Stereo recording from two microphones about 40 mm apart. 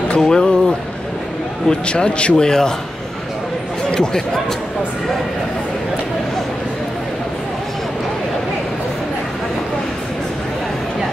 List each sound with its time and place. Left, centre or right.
0.2 s a sound: centre
1.7 s a man's voice: left
3.9 s speech: centre